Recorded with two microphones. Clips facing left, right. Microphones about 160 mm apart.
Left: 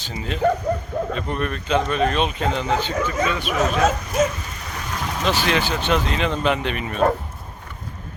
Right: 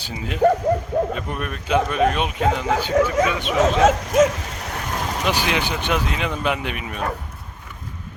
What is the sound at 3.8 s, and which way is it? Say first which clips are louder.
Speech: right 5 dB; 90° right.